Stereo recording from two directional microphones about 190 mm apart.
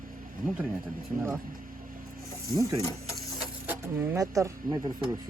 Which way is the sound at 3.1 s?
5° right (ahead or behind).